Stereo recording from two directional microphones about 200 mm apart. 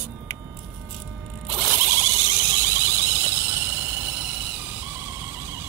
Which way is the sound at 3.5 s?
10° right (ahead or behind).